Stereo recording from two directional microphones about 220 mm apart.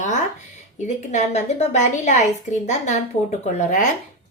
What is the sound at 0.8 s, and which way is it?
A woman's voice, 30° left (ahead or behind).